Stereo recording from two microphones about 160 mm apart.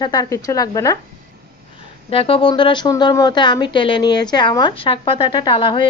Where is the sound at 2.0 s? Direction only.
35° left (ahead or behind).